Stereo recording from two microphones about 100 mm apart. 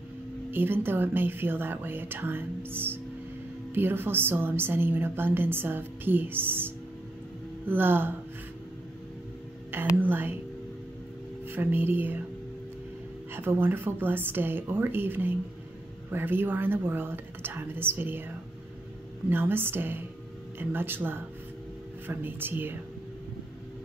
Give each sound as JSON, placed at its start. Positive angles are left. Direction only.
{"t": 0.5, "sound": "a woman's voice", "side_deg": -20}
{"t": 9.8, "sound": "a woman's voice", "side_deg": -20}
{"t": 11.4, "sound": "a woman's voice", "side_deg": -20}
{"t": 13.3, "sound": "a woman's voice", "side_deg": -25}